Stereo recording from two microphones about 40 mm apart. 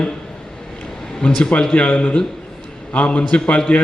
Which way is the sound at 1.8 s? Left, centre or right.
Left.